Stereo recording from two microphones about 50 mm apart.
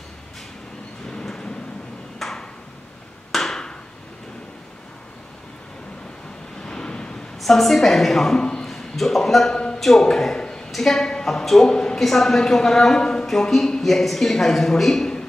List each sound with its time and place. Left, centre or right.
1.1 s a sound: centre
2.1 s ping: centre
3.3 s chop: centre
6.6 s waves: centre
7.3 s a woman's voice: centre
8.4 s a man's voice: centre
8.6 s a man's voice: centre